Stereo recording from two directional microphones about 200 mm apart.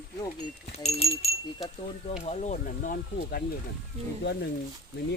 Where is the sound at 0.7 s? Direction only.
30° left (ahead or behind).